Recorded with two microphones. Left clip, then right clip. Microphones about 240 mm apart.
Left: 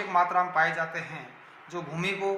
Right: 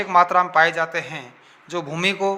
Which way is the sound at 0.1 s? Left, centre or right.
Right.